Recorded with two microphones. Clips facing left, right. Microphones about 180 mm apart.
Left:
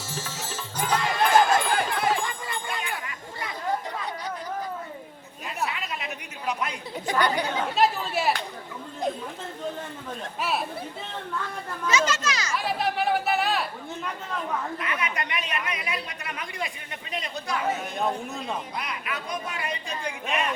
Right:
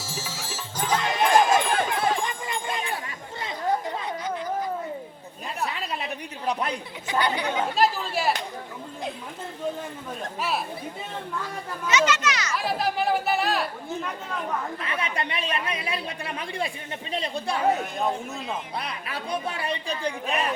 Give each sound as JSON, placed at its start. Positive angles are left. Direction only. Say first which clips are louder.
{"t": 0.0, "sound": "music", "louder": "even", "side_deg": -10}
{"t": 0.9, "sound": "a sound", "louder": "even", "side_deg": -20}
{"t": 5.6, "sound": "a sound", "louder": "right 2 dB", "side_deg": -35}
{"t": 7.1, "sound": "speech", "louder": "left 1 dB", "side_deg": 45}
{"t": 7.8, "sound": "chatter", "louder": "left 2 dB", "side_deg": 0}
{"t": 11.9, "sound": "a child's voice", "louder": "right 2 dB", "side_deg": 30}
{"t": 12.5, "sound": "speech", "louder": "even", "side_deg": 0}
{"t": 14.8, "sound": "speech", "louder": "right 1 dB", "side_deg": -30}
{"t": 17.7, "sound": "speech", "louder": "right 3 dB", "side_deg": 0}
{"t": 18.8, "sound": "speech", "louder": "even", "side_deg": -30}